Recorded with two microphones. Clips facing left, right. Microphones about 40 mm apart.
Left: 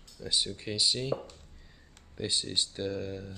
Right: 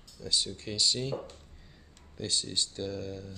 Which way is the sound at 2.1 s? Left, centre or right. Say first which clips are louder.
Left 1 dB; centre.